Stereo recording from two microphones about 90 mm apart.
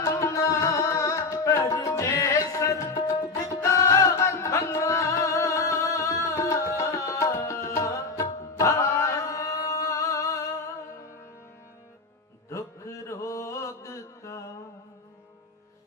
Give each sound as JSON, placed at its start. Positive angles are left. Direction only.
{"t": 0.0, "sound": "music", "side_deg": 35}
{"t": 12.5, "sound": "mantra", "side_deg": 35}